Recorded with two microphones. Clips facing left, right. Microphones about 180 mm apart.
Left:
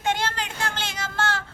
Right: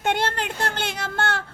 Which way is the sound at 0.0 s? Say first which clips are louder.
Right 3 dB; 60° right (ahead or behind).